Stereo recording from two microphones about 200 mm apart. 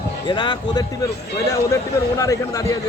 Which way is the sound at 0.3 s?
20° left (ahead or behind).